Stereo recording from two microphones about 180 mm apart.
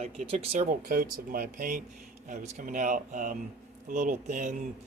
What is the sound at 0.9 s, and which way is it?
Speech, 55° right (ahead or behind).